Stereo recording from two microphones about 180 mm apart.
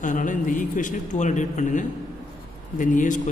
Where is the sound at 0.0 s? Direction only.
45° left (ahead or behind).